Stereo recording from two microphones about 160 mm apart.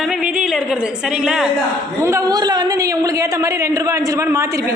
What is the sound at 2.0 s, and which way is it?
A woman's voice, 20° right (ahead or behind).